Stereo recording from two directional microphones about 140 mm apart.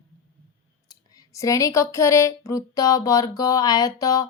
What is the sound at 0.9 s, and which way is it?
A woman's voice, 20° left (ahead or behind).